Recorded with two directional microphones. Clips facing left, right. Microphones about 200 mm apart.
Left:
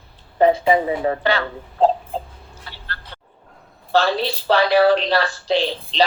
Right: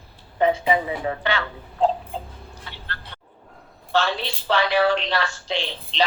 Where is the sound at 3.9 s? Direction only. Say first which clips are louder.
Left 5 dB; 35° left (ahead or behind).